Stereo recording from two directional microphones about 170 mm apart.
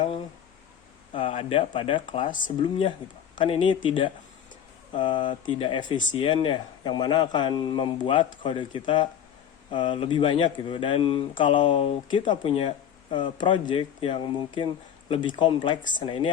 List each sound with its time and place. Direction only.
1.1 s speech: 30° left (ahead or behind)